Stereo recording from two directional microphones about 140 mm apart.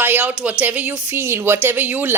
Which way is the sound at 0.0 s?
15° right (ahead or behind).